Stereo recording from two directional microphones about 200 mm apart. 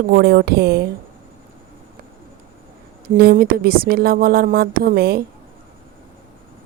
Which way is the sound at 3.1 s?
50° right (ahead or behind).